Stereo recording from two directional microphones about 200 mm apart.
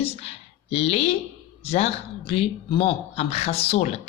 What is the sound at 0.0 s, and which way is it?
Speech, 30° left (ahead or behind).